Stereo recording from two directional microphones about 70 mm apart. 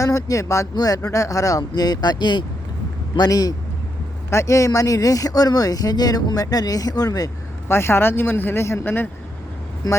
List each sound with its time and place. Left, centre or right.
0.0 s speech: left
0.8 s speech: left
3.2 s speech: left
4.3 s speech: left
7.7 s speech: left
9.8 s speech: left